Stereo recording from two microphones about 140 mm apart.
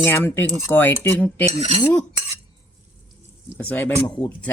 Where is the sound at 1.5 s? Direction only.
40° right (ahead or behind).